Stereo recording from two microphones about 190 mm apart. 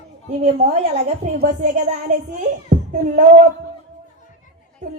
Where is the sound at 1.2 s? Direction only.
35° right (ahead or behind).